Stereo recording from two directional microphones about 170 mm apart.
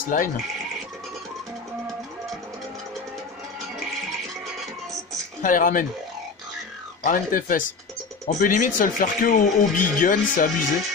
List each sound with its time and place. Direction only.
0.1 s speech: 55° left (ahead or behind)
5.4 s speech: 50° left (ahead or behind)
7.0 s speech: 50° left (ahead or behind)